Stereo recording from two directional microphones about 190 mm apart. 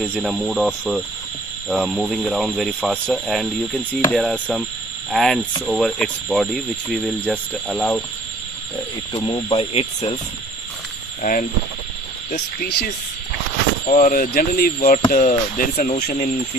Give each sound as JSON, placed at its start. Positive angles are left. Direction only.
{"t": 0.1, "sound": "speech", "side_deg": 0}
{"t": 9.1, "sound": "speech", "side_deg": 20}
{"t": 9.5, "sound": "speech", "side_deg": 30}
{"t": 11.2, "sound": "speech", "side_deg": 45}
{"t": 13.8, "sound": "speech", "side_deg": 45}